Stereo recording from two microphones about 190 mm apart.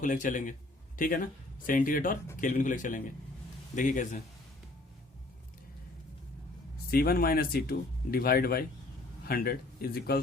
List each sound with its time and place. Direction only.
0.0 s a man's voice: 40° left (ahead or behind)
6.9 s speech: 50° left (ahead or behind)